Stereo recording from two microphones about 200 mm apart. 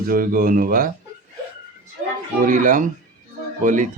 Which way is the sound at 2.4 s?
40° right (ahead or behind).